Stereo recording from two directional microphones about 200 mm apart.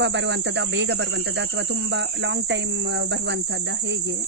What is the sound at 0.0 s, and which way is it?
Speech, 60° right (ahead or behind).